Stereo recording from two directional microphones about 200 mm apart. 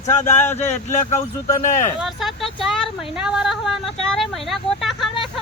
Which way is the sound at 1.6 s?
40° left (ahead or behind).